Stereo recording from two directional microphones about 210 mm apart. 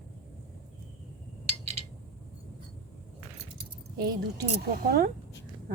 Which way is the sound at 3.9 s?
50° right (ahead or behind).